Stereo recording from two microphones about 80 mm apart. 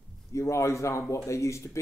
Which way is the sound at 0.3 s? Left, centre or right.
Left.